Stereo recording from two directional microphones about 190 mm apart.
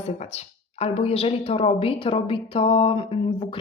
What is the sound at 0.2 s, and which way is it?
A woman's voice, 35° left (ahead or behind).